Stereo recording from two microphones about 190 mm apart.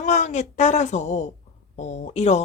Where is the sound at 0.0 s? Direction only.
40° left (ahead or behind).